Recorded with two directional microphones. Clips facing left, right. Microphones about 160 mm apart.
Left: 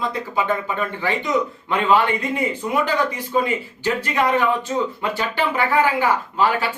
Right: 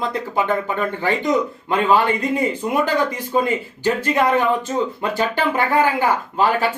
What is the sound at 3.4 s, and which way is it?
Speech, 45° right (ahead or behind).